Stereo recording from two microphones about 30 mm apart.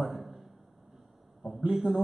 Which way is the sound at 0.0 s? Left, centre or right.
Centre.